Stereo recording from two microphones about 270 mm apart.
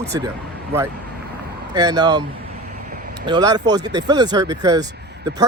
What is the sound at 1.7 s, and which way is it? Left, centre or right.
Speech, centre.